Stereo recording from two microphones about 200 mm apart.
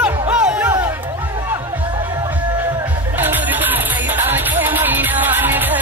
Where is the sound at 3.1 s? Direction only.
10° right (ahead or behind).